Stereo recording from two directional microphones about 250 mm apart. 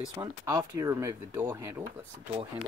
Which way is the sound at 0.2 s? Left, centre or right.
Centre.